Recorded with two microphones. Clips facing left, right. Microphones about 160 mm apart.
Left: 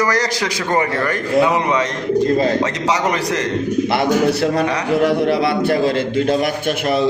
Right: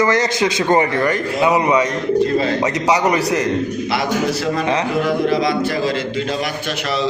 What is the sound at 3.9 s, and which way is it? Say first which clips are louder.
A man's voice: left 4 dB; 60° left (ahead or behind).